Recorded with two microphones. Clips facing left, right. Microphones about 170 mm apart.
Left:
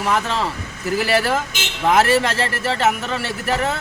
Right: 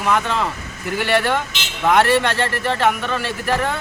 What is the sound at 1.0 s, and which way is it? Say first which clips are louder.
Speech: right 1 dB; centre (ahead or behind).